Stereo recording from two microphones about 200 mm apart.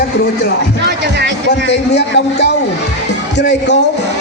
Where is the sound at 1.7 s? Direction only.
60° left (ahead or behind).